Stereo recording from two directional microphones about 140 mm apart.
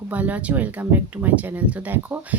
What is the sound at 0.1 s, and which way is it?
Speech, 10° right (ahead or behind).